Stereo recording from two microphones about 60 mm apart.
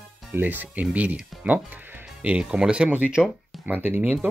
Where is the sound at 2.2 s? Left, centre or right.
Centre.